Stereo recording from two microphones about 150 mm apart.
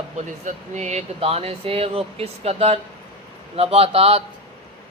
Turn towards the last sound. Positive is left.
turn(degrees=-40)  # may be behind; listen again after turning